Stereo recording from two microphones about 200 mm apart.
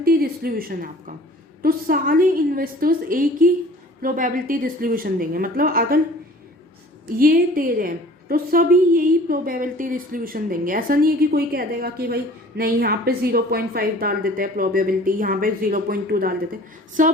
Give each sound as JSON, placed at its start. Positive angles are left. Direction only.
{"t": 0.0, "sound": "a woman's voice", "side_deg": -45}
{"t": 7.2, "sound": "a woman's voice", "side_deg": -45}
{"t": 17.0, "sound": "a sound", "side_deg": -40}